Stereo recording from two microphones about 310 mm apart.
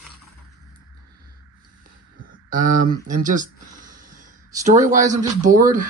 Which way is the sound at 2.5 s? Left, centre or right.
Right.